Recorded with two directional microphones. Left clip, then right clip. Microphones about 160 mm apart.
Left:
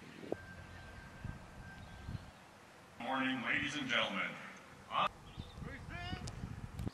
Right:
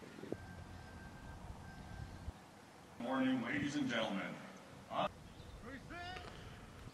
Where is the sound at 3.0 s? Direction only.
25° left (ahead or behind).